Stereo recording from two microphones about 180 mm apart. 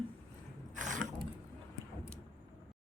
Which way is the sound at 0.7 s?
45° right (ahead or behind).